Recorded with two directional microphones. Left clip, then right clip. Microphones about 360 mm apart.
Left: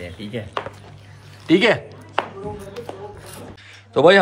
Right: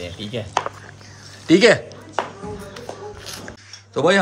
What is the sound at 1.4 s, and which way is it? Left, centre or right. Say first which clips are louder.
Speech: right 3 dB; centre.